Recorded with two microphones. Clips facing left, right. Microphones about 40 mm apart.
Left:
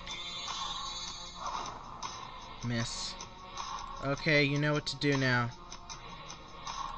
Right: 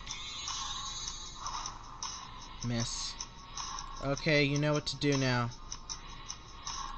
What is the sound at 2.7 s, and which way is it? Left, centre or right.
Speech, centre.